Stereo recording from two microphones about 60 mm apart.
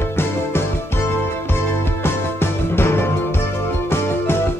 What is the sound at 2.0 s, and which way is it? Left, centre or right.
Music, left.